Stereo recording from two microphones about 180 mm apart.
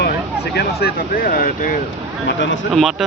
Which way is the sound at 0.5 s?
60° left (ahead or behind).